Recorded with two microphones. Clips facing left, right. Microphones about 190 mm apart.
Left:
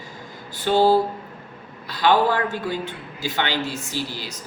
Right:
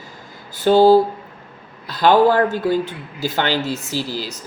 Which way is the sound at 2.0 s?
45° right (ahead or behind).